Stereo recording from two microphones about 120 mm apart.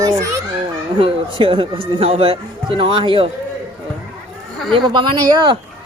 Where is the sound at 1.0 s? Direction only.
50° right (ahead or behind).